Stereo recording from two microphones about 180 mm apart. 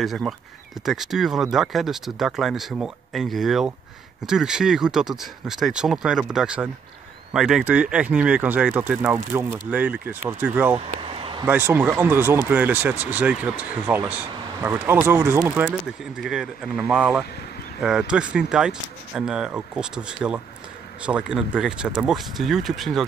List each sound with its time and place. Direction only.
0.0 s speech: centre (ahead or behind)
11.0 s a sound: 30° right (ahead or behind)
11.4 s speech: 10° right (ahead or behind)